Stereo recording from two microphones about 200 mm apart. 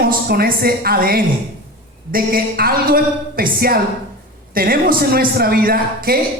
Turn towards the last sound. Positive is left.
turn(degrees=-50)  # may be behind; listen again after turning